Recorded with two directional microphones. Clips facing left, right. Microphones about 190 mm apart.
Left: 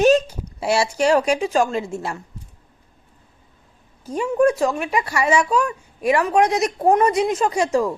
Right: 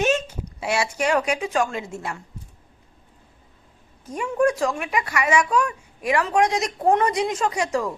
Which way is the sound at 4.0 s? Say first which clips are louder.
Left 4 dB; 30° left (ahead or behind).